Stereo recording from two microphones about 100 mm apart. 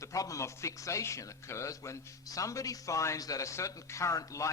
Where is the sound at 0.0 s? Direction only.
35° left (ahead or behind).